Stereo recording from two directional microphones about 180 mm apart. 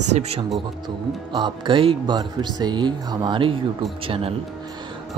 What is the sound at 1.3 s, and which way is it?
Speech, 25° right (ahead or behind).